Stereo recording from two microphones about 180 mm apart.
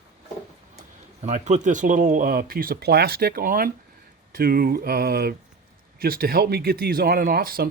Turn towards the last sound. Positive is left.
turn(degrees=-55)  # may be behind; listen again after turning